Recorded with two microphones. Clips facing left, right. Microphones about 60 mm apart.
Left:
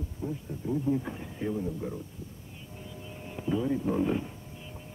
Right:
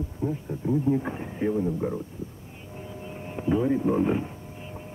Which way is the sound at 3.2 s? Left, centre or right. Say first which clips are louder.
Right 5 dB; right.